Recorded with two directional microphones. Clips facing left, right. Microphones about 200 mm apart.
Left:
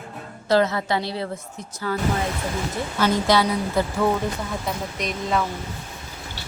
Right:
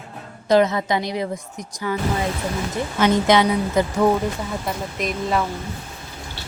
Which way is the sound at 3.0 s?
20° right (ahead or behind).